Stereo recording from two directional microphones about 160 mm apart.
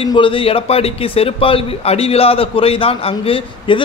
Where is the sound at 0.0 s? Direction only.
30° left (ahead or behind).